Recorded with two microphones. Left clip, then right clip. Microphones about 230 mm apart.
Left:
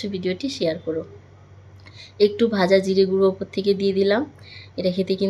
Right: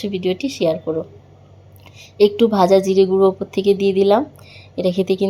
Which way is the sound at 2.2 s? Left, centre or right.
Left.